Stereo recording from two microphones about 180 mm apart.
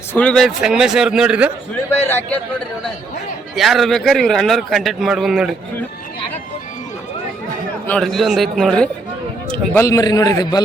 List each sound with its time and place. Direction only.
0.1 s a man's voice: 5° left (ahead or behind)
1.7 s a man's voice: 10° left (ahead or behind)
3.5 s a man's voice: centre (ahead or behind)
7.9 s a man's voice: centre (ahead or behind)
9.5 s speech: 15° left (ahead or behind)